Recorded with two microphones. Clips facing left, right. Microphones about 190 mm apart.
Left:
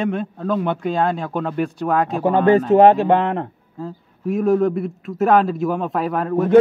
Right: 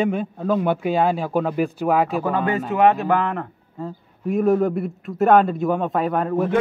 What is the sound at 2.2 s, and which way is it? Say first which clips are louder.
A man's voice: left 7 dB; 30° left (ahead or behind).